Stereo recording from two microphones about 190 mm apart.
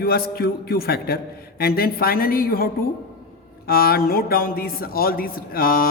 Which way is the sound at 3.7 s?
50° left (ahead or behind).